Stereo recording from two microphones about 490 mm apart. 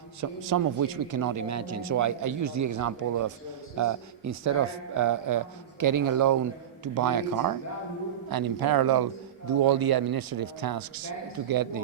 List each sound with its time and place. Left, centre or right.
0.2 s a man's voice: right